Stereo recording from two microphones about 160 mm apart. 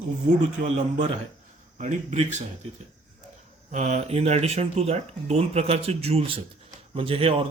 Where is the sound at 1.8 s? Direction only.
45° right (ahead or behind).